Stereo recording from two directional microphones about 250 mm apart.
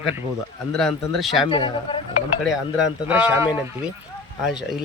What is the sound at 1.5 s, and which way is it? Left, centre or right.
Speech, centre.